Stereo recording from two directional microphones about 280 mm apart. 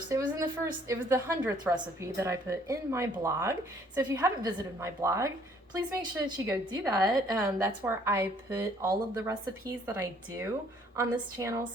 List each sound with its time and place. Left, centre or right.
0.1 s a woman's voice: centre